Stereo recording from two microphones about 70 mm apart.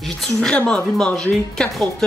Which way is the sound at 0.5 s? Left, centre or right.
Centre.